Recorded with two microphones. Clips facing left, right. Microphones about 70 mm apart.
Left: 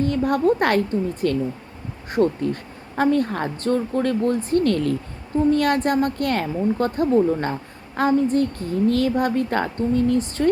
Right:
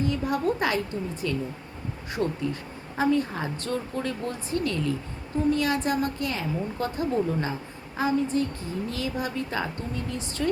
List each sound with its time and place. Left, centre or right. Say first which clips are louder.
0.0 s a woman's voice: left 6 dB; left